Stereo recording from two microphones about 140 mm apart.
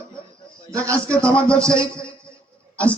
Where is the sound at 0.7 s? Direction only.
20° right (ahead or behind).